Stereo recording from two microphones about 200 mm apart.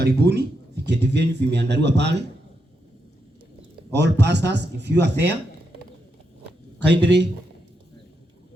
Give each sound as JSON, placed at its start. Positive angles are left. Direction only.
{"t": 0.0, "sound": "speech", "side_deg": -55}
{"t": 3.9, "sound": "speech", "side_deg": -60}
{"t": 6.7, "sound": "speech", "side_deg": -60}